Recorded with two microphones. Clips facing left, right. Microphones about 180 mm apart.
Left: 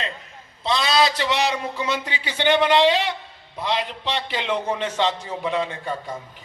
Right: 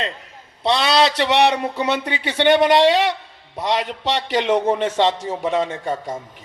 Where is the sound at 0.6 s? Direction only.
70° right (ahead or behind).